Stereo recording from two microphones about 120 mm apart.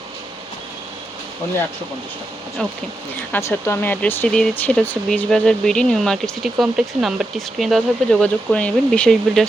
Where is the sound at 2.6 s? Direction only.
10° left (ahead or behind).